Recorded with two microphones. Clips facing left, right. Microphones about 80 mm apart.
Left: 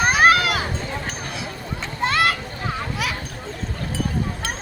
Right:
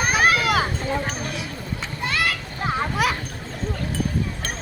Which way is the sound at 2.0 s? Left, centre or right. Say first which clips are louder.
Left 5 dB; left.